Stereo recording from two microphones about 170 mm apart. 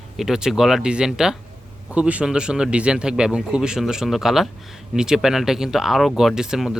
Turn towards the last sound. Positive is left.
turn(degrees=0)  # may be behind; listen again after turning